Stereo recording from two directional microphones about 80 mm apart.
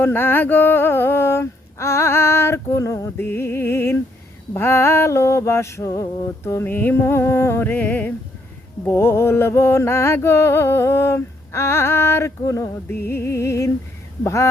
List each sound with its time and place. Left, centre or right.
0.0 s music: left
8.9 s music: left